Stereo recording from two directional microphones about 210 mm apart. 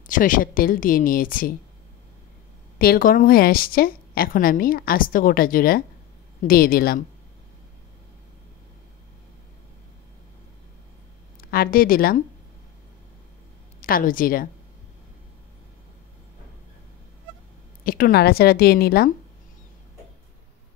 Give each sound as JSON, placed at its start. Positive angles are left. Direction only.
{"t": 0.0, "sound": "speech", "side_deg": 40}
{"t": 2.8, "sound": "a woman's voice", "side_deg": 45}
{"t": 11.5, "sound": "a woman's voice", "side_deg": 45}
{"t": 13.7, "sound": "speech", "side_deg": 40}
{"t": 17.8, "sound": "a woman's voice", "side_deg": 45}